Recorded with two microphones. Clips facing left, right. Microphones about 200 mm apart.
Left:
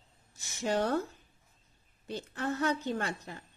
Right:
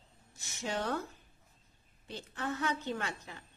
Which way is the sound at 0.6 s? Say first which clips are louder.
Left 6 dB; 40° left (ahead or behind).